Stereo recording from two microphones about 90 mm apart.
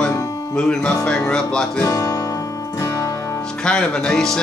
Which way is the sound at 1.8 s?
40° left (ahead or behind).